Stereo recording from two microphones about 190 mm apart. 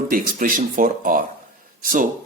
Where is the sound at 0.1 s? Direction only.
45° right (ahead or behind).